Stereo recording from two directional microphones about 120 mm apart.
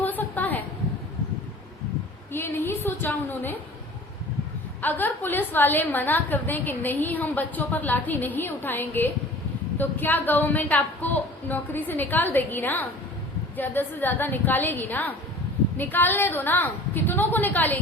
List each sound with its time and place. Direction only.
0.0 s a sound: 15° left (ahead or behind)
2.3 s a woman's voice: 20° left (ahead or behind)
4.8 s a woman's voice: 15° left (ahead or behind)